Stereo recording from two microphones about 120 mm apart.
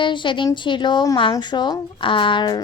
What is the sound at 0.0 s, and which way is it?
A woman's voice, 40° left (ahead or behind).